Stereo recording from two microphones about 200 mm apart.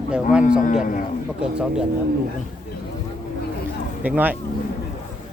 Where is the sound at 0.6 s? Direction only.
40° left (ahead or behind).